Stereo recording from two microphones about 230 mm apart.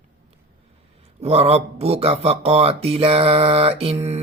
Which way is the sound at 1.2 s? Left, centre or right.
Right.